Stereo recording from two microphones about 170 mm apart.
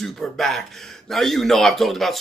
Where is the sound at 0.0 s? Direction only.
Centre (ahead or behind).